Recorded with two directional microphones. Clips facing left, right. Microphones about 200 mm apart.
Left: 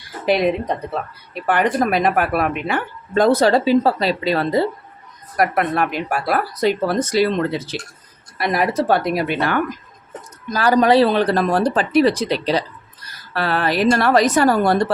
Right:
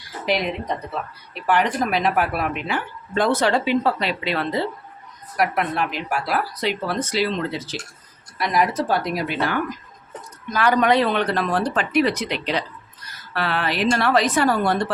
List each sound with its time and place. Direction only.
1.3 s speech: 50° left (ahead or behind)
5.4 s speech: 50° left (ahead or behind)
10.5 s speech: 35° left (ahead or behind)